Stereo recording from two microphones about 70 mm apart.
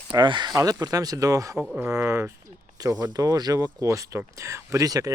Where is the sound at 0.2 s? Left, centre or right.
Right.